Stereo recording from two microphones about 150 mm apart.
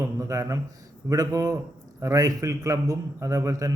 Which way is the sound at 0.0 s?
20° right (ahead or behind).